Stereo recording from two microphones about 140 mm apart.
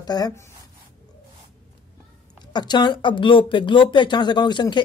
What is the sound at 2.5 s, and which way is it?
Speech, 30° left (ahead or behind).